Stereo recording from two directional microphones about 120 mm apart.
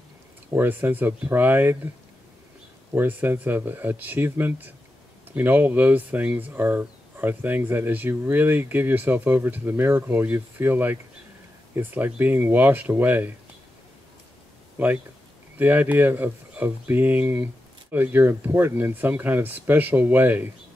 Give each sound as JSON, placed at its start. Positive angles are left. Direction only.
{"t": 0.6, "sound": "speech", "side_deg": -15}
{"t": 2.9, "sound": "speech", "side_deg": -15}
{"t": 15.5, "sound": "speech", "side_deg": -15}